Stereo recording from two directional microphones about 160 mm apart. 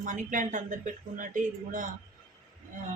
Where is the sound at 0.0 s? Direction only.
55° right (ahead or behind).